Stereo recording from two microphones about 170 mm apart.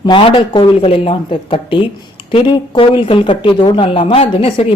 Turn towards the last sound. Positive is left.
turn(degrees=35)  # may be behind; listen again after turning